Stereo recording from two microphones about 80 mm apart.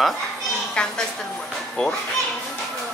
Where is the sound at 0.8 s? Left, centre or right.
Centre.